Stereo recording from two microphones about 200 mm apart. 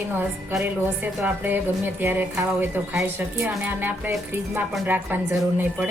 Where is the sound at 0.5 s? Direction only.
5° right (ahead or behind).